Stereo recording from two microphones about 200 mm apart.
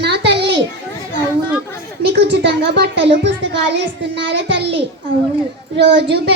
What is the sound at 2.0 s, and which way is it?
A child's voice, 55° right (ahead or behind).